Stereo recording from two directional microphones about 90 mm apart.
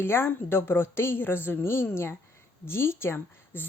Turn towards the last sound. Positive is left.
turn(degrees=25)  # may be behind; listen again after turning